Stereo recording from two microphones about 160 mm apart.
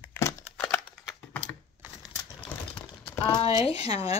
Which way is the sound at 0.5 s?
5° left (ahead or behind).